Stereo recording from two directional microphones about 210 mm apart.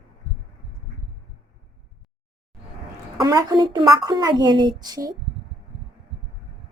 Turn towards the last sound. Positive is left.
turn(degrees=-20)  # may be behind; listen again after turning